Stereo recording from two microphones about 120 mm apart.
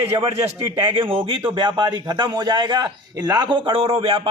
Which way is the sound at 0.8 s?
45° right (ahead or behind).